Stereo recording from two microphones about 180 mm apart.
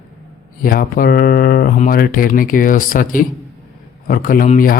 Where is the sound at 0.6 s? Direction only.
50° left (ahead or behind).